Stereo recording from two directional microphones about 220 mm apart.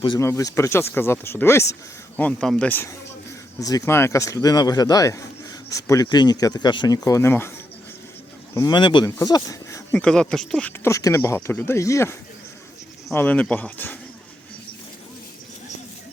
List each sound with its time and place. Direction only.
0.0 s a man's voice: 15° left (ahead or behind)
8.5 s a man's voice: 20° left (ahead or behind)